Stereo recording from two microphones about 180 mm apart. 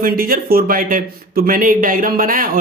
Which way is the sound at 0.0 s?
55° right (ahead or behind).